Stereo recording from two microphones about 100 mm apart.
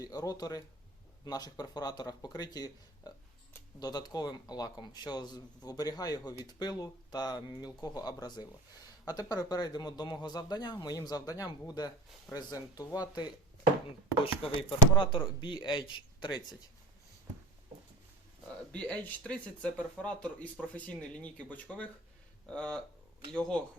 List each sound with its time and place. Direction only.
0.0 s a man's voice: 35° left (ahead or behind)
14.7 s speech: 50° left (ahead or behind)
18.4 s speech: 10° left (ahead or behind)